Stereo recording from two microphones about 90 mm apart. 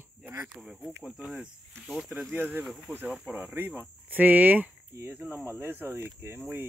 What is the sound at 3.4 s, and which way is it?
Speech, 20° right (ahead or behind).